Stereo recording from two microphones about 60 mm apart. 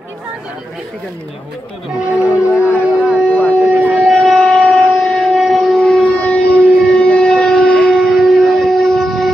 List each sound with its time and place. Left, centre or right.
2.0 s music: right
2.8 s howl: right
3.5 s wind instrument: right
4.1 s a sound: centre
5.0 s wind instrument: centre
6.0 s a sound: centre
6.9 s civil defense siren: centre
7.2 s a sound: centre
8.1 s wind instrument: centre